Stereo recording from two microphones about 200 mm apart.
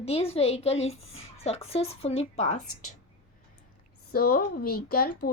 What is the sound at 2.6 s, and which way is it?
Speech, 90° left.